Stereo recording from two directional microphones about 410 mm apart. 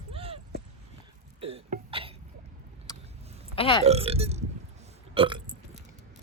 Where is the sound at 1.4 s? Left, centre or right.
Centre.